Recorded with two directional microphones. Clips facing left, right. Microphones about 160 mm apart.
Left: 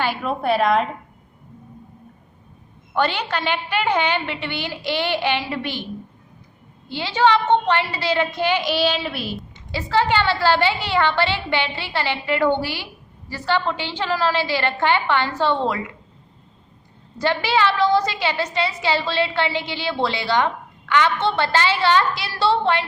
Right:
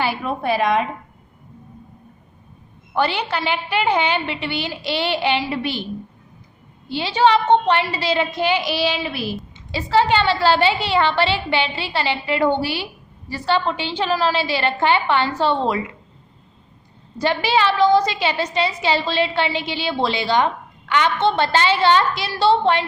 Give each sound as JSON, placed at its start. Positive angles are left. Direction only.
{"t": 0.0, "sound": "a woman's voice", "side_deg": -5}
{"t": 2.9, "sound": "a woman's voice", "side_deg": -10}
{"t": 6.9, "sound": "a woman's voice", "side_deg": -15}
{"t": 9.7, "sound": "a woman's voice", "side_deg": -15}
{"t": 17.2, "sound": "a woman's voice", "side_deg": -15}